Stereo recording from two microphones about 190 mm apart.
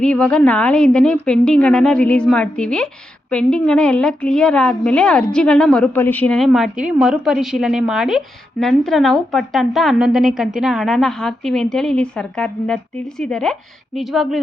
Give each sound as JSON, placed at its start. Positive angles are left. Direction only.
{"t": 0.0, "sound": "a woman's voice", "side_deg": 5}